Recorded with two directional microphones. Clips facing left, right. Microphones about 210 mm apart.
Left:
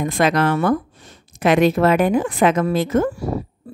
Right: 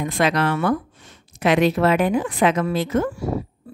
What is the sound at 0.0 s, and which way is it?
A woman's voice, 45° left (ahead or behind).